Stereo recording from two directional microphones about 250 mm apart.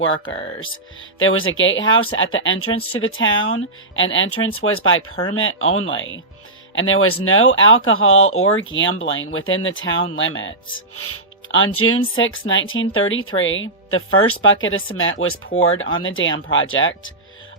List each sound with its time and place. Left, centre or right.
0.0 s speech: left